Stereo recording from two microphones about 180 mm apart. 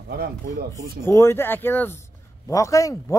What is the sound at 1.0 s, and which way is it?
A woman's voice, 15° left (ahead or behind).